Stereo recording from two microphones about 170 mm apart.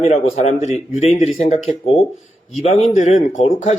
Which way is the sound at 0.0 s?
40° left (ahead or behind).